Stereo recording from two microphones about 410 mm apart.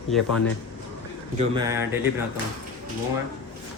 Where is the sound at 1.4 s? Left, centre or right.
Centre.